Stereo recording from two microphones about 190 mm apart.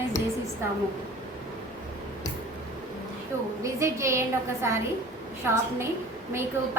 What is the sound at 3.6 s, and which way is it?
A woman's voice, 15° right (ahead or behind).